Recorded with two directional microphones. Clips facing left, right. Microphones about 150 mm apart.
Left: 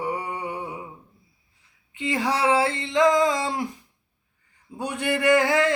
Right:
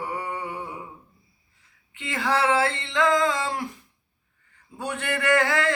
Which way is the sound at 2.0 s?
15° left (ahead or behind).